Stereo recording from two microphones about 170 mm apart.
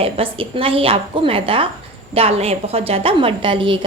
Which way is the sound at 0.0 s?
30° right (ahead or behind).